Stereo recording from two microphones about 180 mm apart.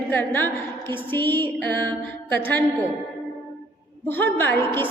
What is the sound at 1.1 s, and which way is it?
Speech, 10° left (ahead or behind).